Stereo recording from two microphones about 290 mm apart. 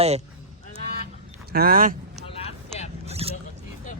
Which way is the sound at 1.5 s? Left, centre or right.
Right.